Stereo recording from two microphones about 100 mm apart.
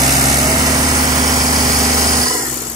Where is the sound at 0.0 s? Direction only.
40° right (ahead or behind).